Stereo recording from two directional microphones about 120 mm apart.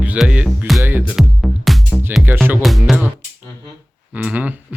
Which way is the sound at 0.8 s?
15° right (ahead or behind).